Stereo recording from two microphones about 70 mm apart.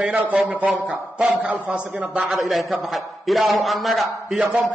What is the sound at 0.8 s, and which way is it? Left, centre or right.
A man's voice, centre.